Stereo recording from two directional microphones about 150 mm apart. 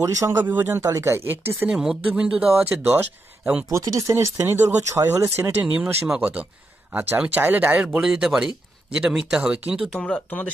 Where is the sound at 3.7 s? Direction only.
20° right (ahead or behind).